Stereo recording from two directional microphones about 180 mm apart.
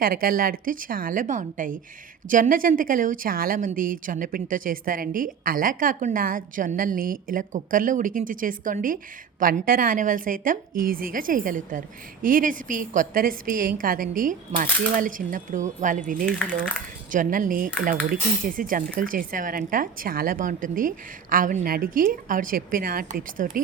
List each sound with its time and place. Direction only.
0.0 s a woman's voice: 55° right (ahead or behind)